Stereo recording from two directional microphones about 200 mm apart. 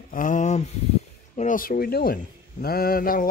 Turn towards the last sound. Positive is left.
turn(degrees=45)  # may be behind; listen again after turning